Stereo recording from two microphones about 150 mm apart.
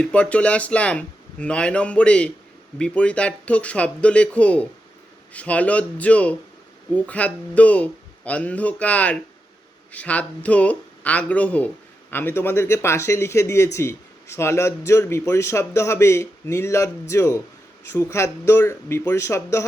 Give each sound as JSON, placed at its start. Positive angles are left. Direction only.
{"t": 0.0, "sound": "a man's voice", "side_deg": 10}